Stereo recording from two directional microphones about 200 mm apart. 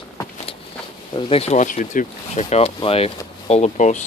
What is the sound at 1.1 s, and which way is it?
Speech, 25° left (ahead or behind).